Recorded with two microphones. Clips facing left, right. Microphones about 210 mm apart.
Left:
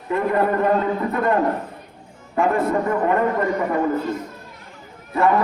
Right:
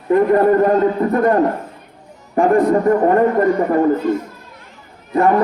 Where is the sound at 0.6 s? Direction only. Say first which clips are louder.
Right 5 dB; 45° right (ahead or behind).